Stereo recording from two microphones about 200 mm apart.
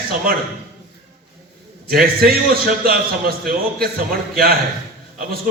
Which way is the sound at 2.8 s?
50° right (ahead or behind).